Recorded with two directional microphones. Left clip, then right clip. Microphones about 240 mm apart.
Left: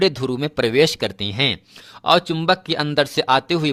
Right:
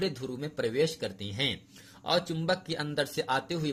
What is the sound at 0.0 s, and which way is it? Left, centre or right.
Speech, left.